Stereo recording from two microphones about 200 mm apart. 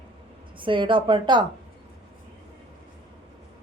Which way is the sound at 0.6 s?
25° right (ahead or behind).